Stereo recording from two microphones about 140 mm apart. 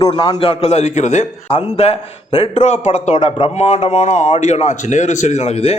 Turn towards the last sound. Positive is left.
turn(degrees=50)  # may be behind; listen again after turning